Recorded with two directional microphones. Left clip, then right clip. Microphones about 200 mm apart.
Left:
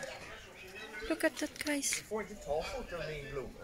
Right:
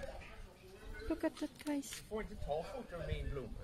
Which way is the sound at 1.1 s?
Centre (ahead or behind).